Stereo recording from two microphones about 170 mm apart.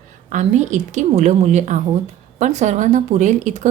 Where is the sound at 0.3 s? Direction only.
45° right (ahead or behind).